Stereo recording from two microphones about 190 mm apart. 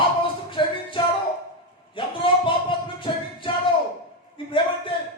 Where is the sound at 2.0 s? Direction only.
25° left (ahead or behind).